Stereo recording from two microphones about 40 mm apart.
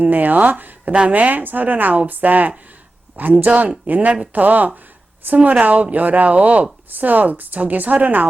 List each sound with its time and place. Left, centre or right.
0.0 s a woman's voice: right